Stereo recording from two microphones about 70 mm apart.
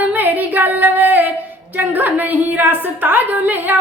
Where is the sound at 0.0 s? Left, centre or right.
Right.